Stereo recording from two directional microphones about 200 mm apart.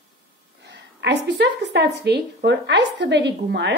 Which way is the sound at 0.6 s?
60° right (ahead or behind).